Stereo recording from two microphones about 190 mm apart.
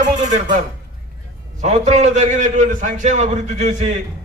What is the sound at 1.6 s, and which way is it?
A man's voice, 40° right (ahead or behind).